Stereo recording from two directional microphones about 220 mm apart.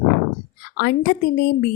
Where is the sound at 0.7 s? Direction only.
50° left (ahead or behind).